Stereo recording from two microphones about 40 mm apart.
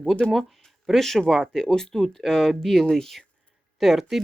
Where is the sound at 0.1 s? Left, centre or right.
Centre.